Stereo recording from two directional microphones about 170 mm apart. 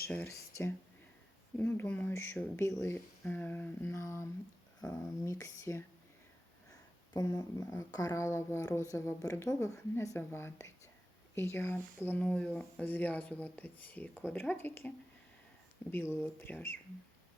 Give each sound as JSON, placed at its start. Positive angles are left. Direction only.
{"t": 0.1, "sound": "speech", "side_deg": 10}
{"t": 7.1, "sound": "speech", "side_deg": 25}